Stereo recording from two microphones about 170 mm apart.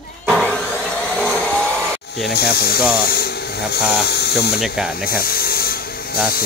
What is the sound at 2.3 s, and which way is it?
Speech, 70° left (ahead or behind).